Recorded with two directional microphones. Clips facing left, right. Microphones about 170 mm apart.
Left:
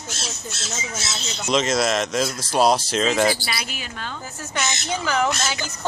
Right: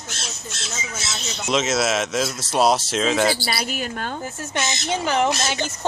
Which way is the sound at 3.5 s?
40° right (ahead or behind).